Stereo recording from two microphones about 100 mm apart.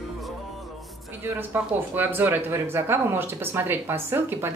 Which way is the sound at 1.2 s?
20° right (ahead or behind).